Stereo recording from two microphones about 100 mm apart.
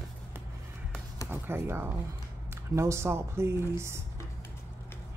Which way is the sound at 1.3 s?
25° right (ahead or behind).